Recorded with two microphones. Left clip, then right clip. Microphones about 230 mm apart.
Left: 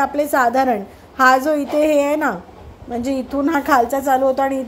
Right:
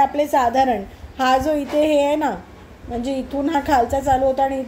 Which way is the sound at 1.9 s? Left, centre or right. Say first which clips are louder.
Left 1 dB; left.